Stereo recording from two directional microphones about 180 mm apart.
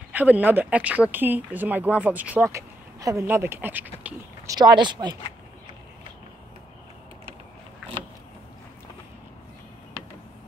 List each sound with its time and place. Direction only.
0.1 s speech: 10° right (ahead or behind)
4.6 s speech: 25° right (ahead or behind)